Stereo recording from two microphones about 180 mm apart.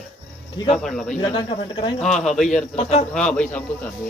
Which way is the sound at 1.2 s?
25° left (ahead or behind).